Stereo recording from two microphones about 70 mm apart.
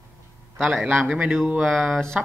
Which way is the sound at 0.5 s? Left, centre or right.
Centre.